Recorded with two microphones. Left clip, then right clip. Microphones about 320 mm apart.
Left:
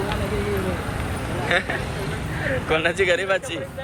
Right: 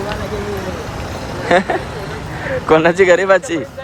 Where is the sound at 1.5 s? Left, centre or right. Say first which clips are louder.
Right 9 dB; right.